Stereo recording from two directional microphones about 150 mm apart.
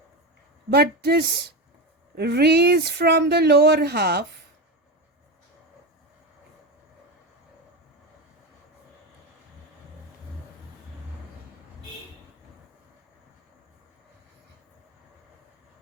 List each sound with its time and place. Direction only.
0.7 s speech: 90° right